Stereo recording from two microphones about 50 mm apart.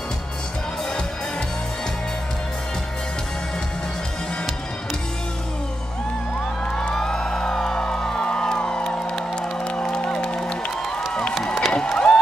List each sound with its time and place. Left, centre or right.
6.7 s music: centre
11.4 s music: centre
11.7 s music: centre